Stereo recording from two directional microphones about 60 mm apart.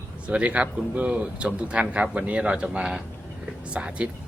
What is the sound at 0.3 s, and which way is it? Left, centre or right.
Speech, right.